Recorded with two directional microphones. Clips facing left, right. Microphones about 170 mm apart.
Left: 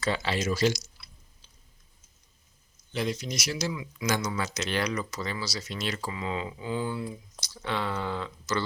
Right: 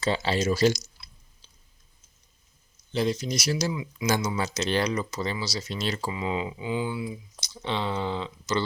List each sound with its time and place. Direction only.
0.0 s speech: 30° right (ahead or behind)
2.9 s speech: 30° right (ahead or behind)
3.7 s speech: 25° right (ahead or behind)
6.1 s speech: 20° right (ahead or behind)